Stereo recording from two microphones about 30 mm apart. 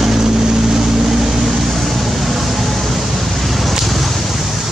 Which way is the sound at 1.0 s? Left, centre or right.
Centre.